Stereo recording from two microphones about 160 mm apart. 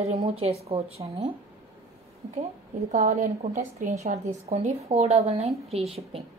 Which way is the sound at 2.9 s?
50° right (ahead or behind).